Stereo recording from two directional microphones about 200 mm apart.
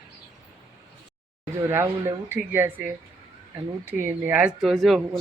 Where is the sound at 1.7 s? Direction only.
15° right (ahead or behind).